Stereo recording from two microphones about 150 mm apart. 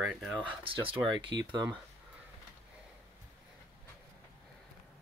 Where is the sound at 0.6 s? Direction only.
35° right (ahead or behind).